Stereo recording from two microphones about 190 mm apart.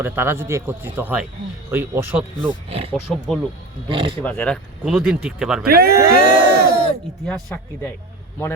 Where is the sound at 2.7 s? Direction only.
30° right (ahead or behind).